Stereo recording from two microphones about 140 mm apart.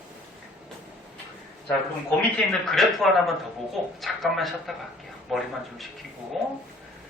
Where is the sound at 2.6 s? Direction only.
Centre (ahead or behind).